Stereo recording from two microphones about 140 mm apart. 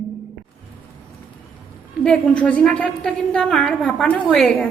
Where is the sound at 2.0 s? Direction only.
10° left (ahead or behind).